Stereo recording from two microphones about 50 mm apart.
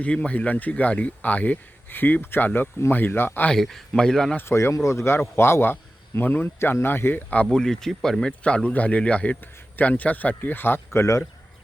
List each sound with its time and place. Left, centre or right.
0.0 s speech: left
3.5 s a man's voice: centre
4.4 s a man's voice: left
7.5 s a man's voice: centre
8.3 s speech: left
9.4 s speech: left